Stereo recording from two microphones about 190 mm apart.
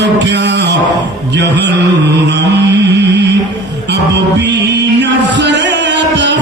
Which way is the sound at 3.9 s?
65° right (ahead or behind).